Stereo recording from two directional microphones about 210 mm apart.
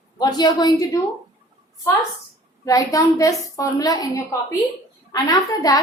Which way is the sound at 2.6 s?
15° left (ahead or behind).